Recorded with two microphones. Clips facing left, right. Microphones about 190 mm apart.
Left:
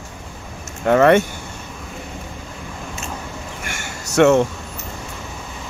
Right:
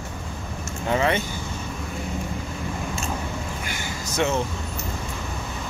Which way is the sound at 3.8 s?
70° left (ahead or behind).